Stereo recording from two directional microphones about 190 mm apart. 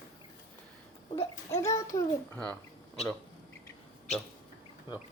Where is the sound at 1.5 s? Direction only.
15° left (ahead or behind).